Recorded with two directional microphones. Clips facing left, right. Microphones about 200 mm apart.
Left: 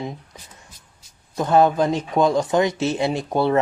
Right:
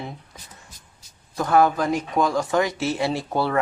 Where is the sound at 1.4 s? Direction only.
20° left (ahead or behind).